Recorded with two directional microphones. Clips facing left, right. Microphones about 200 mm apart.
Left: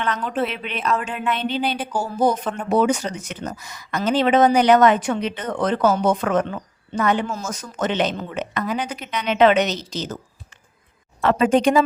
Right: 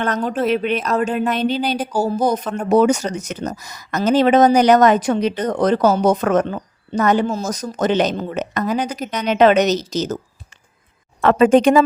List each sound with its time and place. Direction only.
0.0 s speech: 40° right (ahead or behind)
11.2 s speech: 55° right (ahead or behind)